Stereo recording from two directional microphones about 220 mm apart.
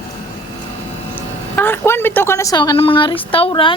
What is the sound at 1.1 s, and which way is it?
A woman's voice, 10° left (ahead or behind).